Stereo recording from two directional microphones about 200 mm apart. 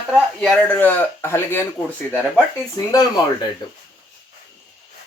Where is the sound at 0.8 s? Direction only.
10° left (ahead or behind).